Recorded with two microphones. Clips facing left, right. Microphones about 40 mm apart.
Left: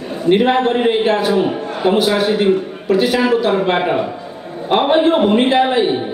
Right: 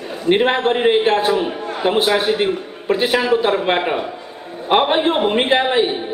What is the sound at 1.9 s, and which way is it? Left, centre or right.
Speech, right.